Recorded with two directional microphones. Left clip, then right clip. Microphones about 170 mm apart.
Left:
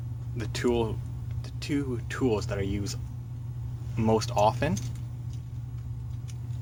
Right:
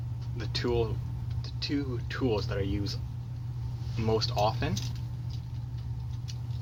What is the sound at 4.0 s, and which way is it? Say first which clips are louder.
Speech: left 4 dB; 50° left (ahead or behind).